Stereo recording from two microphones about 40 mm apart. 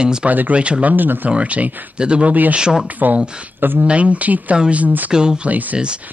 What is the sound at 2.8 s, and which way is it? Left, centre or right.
Speech, right.